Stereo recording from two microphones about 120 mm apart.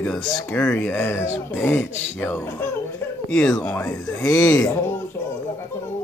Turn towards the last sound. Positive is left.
turn(degrees=25)  # may be behind; listen again after turning